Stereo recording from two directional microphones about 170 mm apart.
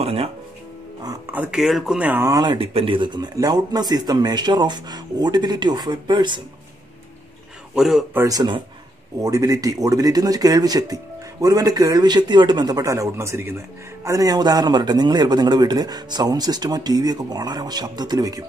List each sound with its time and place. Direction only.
0.0 s speech: 35° right (ahead or behind)
1.0 s a man's voice: 10° right (ahead or behind); by 6.4 s 25° right (ahead or behind)
7.7 s speech: 5° right (ahead or behind)
8.2 s a man's voice: 20° right (ahead or behind)